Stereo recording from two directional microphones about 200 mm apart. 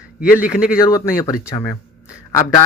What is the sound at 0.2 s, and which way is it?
Speech, 5° right (ahead or behind).